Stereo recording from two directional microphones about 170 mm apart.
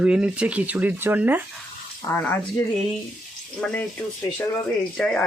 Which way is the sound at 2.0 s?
15° left (ahead or behind).